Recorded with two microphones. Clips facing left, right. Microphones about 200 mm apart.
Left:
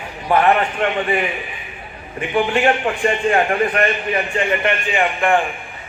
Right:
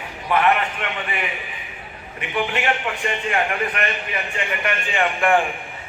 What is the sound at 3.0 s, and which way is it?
A man's voice, 40° left (ahead or behind).